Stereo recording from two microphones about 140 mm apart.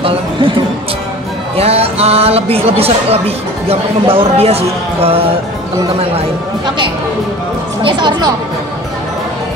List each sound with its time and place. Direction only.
1.6 s speech: 45° right (ahead or behind)
7.8 s speech: 35° right (ahead or behind)